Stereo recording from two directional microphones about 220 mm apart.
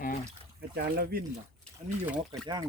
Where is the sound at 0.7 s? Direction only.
45° right (ahead or behind).